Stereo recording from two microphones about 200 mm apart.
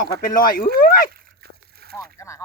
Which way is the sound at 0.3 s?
45° left (ahead or behind).